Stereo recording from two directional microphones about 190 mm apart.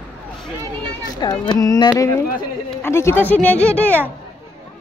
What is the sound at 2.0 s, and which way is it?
Speech, 15° left (ahead or behind).